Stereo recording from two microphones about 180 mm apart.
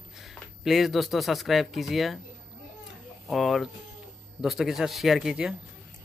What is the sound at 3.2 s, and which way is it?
Speech, centre (ahead or behind).